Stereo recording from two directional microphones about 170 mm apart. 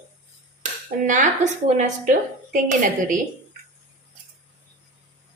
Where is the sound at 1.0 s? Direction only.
45° right (ahead or behind).